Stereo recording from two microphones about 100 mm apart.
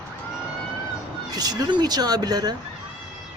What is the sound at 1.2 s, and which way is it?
Speech, 40° right (ahead or behind).